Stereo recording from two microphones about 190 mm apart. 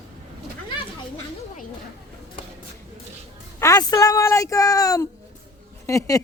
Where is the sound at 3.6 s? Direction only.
20° left (ahead or behind).